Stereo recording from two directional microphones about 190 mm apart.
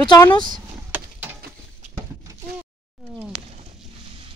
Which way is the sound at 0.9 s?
10° right (ahead or behind).